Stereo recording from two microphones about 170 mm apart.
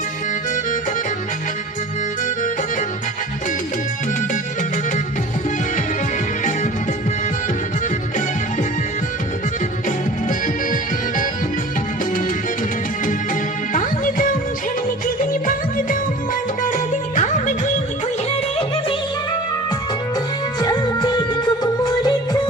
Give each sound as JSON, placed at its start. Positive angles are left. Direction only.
{"t": 10.2, "sound": "music", "side_deg": 50}
{"t": 13.7, "sound": "music", "side_deg": 50}
{"t": 20.6, "sound": "music", "side_deg": 25}